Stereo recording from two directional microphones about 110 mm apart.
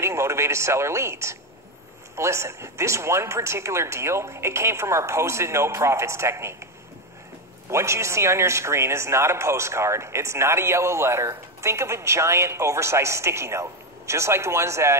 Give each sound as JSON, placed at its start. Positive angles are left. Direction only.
{"t": 0.0, "sound": "speech", "side_deg": -25}
{"t": 7.7, "sound": "speech", "side_deg": -25}